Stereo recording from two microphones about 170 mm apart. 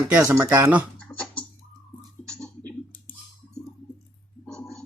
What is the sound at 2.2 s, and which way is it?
Clicking, 5° left (ahead or behind).